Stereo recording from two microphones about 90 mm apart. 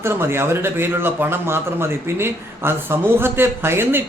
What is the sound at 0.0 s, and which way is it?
A man's voice, 30° right (ahead or behind).